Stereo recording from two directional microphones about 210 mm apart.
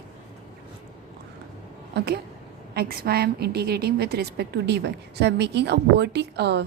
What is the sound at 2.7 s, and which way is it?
A woman's voice, 45° right (ahead or behind).